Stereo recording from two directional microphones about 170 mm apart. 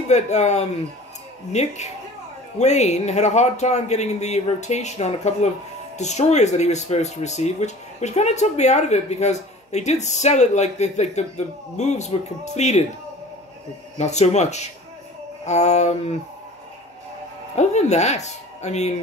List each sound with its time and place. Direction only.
0.1 s speech: 40° left (ahead or behind)
13.9 s speech: 40° left (ahead or behind)
17.6 s speech: 40° left (ahead or behind)